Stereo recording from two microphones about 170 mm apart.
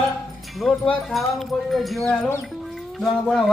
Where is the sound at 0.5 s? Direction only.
Centre (ahead or behind).